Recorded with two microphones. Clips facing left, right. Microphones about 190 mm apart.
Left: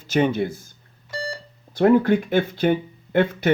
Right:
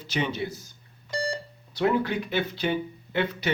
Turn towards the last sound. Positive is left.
turn(degrees=50)  # may be behind; listen again after turning